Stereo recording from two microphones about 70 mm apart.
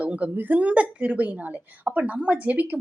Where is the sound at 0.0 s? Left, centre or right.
Right.